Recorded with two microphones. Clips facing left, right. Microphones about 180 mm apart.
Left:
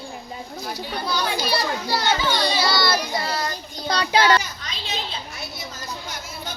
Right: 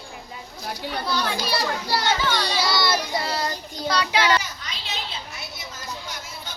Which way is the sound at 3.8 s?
30° left (ahead or behind).